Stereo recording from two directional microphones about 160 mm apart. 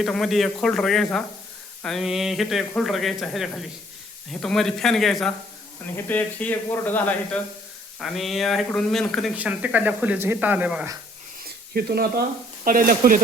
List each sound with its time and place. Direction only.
0.0 s speech: centre (ahead or behind)
9.3 s speech: 10° right (ahead or behind)
11.4 s a sound: 75° right (ahead or behind)
12.6 s speech: 60° right (ahead or behind)